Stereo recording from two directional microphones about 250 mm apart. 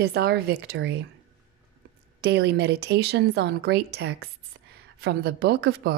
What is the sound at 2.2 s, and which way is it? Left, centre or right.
A woman's voice, right.